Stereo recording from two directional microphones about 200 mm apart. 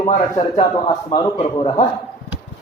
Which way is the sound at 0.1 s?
35° left (ahead or behind).